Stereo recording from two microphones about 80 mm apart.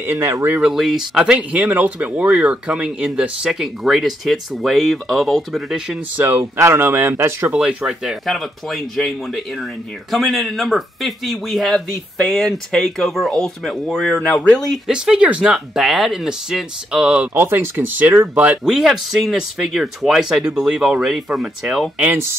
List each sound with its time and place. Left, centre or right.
0.0 s speech: right
0.6 s speech: centre
6.1 s speech: right
7.5 s speech: centre
14.9 s speech: centre
15.5 s speech: centre
17.3 s speech: right
18.7 s speech: centre
21.9 s speech: centre